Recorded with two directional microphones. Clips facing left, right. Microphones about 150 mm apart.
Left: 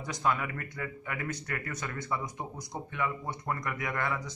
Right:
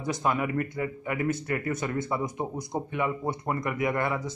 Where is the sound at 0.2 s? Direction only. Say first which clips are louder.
Right 2 dB; 15° right (ahead or behind).